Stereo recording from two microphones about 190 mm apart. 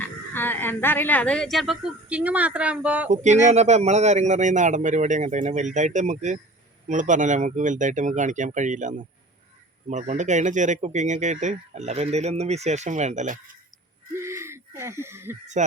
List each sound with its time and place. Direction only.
0.3 s a woman's voice: 10° left (ahead or behind); by 3.1 s 5° right (ahead or behind)
3.1 s speech: 40° right (ahead or behind)
14.1 s a sound: 15° right (ahead or behind)